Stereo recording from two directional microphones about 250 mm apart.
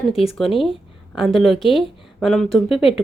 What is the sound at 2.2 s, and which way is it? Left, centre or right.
Speech, centre.